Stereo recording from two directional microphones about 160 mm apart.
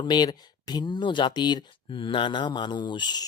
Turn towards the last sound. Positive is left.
turn(degrees=25)  # may be behind; listen again after turning